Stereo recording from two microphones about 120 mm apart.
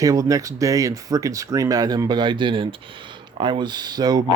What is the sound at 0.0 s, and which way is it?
Speech, 30° right (ahead or behind).